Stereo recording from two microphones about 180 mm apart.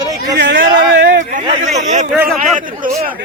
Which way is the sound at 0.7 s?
55° right (ahead or behind).